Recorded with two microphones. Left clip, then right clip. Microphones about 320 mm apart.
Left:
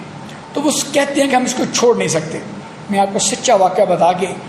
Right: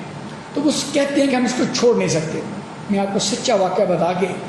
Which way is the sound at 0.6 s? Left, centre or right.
Left.